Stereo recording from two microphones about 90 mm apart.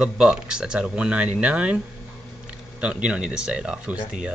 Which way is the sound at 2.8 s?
15° right (ahead or behind).